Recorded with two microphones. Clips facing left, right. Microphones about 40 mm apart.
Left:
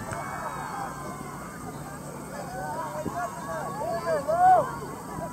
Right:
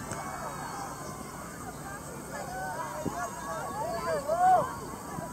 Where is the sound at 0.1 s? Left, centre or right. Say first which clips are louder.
Left 4 dB; left.